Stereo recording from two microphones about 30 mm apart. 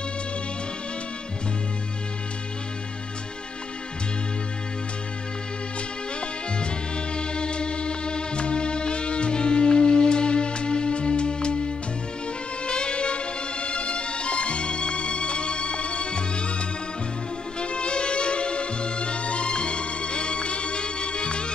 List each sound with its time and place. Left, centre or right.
7.2 s music: left